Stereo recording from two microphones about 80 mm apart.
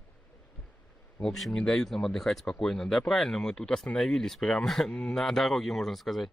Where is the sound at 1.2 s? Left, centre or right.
Centre.